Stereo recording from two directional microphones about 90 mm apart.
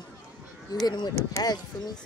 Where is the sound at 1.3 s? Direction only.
30° left (ahead or behind).